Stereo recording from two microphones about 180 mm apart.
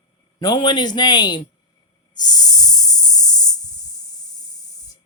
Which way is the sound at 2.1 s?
20° left (ahead or behind).